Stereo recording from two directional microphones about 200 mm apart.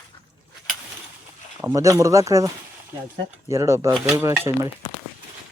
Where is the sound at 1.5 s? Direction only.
15° right (ahead or behind).